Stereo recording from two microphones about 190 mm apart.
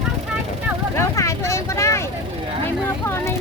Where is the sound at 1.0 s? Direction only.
15° left (ahead or behind).